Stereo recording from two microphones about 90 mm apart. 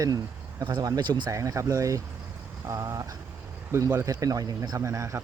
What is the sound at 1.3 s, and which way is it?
Speech, 40° right (ahead or behind).